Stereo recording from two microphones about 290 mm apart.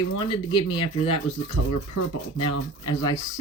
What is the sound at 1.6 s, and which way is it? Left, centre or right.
Speech, left.